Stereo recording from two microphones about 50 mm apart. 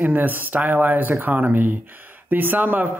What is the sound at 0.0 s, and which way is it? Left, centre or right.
Speech, right.